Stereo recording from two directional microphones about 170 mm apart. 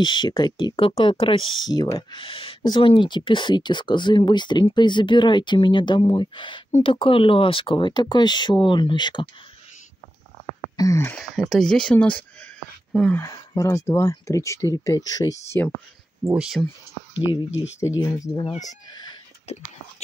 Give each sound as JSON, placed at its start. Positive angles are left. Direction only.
{"t": 0.0, "sound": "speech", "side_deg": 25}
{"t": 10.8, "sound": "speech", "side_deg": 15}
{"t": 11.1, "sound": "speech", "side_deg": 0}
{"t": 13.2, "sound": "speech", "side_deg": 20}
{"t": 16.3, "sound": "speech", "side_deg": -5}
{"t": 17.7, "sound": "speech", "side_deg": 20}
{"t": 18.4, "sound": "speech", "side_deg": 40}